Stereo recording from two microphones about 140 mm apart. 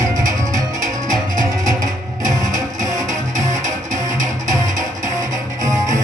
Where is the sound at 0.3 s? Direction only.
25° right (ahead or behind).